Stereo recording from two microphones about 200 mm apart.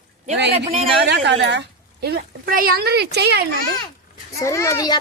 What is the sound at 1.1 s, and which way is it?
A woman's voice, 60° right (ahead or behind).